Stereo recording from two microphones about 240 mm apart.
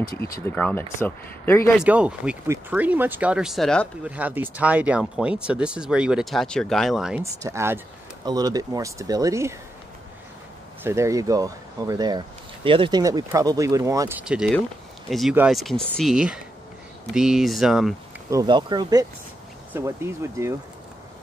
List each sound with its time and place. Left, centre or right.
0.2 s speech: centre
1.8 s speech: centre
10.8 s speech: centre
18.3 s speech: centre